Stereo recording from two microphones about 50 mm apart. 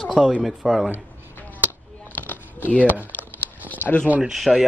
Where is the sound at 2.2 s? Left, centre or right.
Left.